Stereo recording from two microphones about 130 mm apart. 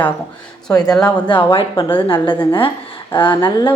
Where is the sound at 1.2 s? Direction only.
40° left (ahead or behind).